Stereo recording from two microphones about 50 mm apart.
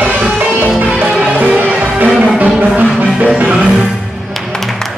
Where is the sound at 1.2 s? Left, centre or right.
Right.